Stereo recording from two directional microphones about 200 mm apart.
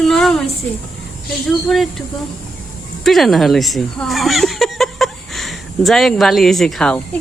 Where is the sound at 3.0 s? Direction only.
Centre (ahead or behind).